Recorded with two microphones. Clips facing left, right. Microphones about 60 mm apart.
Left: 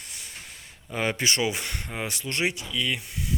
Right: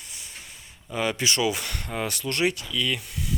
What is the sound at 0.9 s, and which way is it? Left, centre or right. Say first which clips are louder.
Speech: right 1 dB; left.